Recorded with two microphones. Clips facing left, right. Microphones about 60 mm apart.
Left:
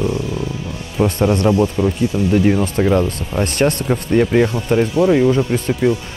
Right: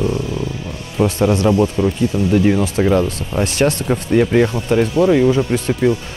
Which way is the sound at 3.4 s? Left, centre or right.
Left.